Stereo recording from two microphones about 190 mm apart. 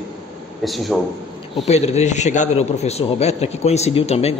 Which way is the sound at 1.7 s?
35° left (ahead or behind).